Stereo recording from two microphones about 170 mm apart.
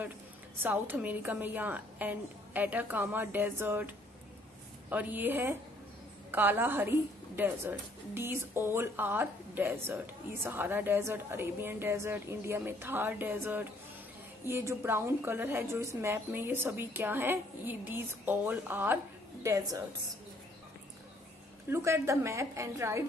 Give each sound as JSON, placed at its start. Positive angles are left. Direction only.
{"t": 0.6, "sound": "a woman's voice", "side_deg": -10}
{"t": 21.6, "sound": "a woman's voice", "side_deg": -15}